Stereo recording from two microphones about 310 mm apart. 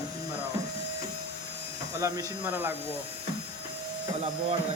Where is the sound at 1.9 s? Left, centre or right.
Centre.